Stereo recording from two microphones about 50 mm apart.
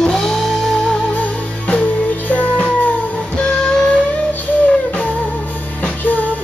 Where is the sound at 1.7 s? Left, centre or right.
Left.